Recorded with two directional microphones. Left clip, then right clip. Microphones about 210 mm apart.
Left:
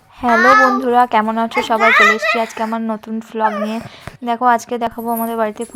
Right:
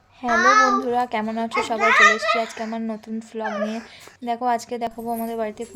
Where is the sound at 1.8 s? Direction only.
60° left (ahead or behind).